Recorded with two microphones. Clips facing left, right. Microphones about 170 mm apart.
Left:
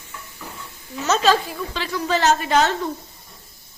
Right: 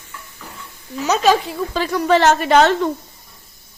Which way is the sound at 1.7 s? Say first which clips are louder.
Right 7 dB; 45° right (ahead or behind).